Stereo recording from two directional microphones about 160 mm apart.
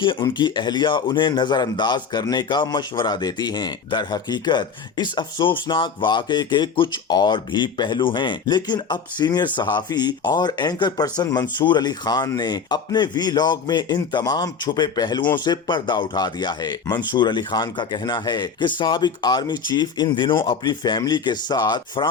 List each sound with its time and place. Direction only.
0.0 s speech: 30° left (ahead or behind)